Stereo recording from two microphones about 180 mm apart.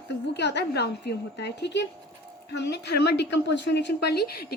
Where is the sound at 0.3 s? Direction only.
70° left (ahead or behind).